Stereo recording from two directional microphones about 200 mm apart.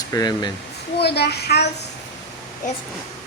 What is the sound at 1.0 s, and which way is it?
Speech, 55° left (ahead or behind).